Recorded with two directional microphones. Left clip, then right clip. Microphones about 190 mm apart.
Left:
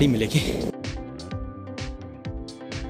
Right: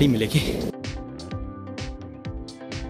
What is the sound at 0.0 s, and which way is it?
Speech, centre (ahead or behind).